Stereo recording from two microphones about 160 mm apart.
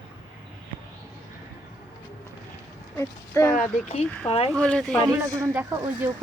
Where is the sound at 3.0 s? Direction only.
20° left (ahead or behind).